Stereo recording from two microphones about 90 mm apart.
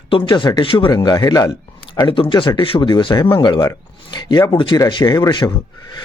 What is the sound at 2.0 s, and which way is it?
Speech, 70° left (ahead or behind).